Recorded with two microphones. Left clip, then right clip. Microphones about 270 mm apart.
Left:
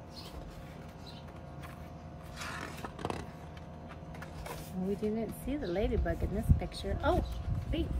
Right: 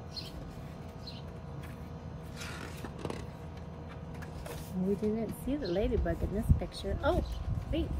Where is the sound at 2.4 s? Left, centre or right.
Centre.